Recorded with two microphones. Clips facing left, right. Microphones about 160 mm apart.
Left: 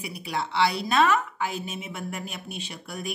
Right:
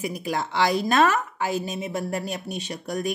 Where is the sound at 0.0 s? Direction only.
45° right (ahead or behind).